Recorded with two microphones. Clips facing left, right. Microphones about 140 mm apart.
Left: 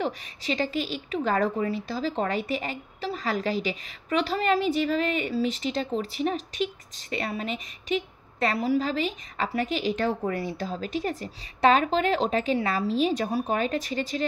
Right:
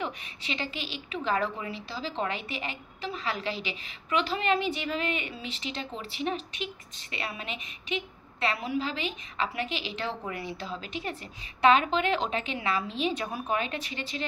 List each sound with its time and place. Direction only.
0.0 s a woman's voice: 40° left (ahead or behind)